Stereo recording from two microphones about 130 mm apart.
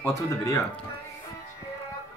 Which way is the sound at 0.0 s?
20° left (ahead or behind).